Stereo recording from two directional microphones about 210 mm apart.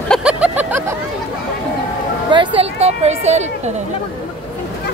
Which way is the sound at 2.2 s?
25° right (ahead or behind).